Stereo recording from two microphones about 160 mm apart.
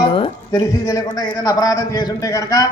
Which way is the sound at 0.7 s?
20° left (ahead or behind).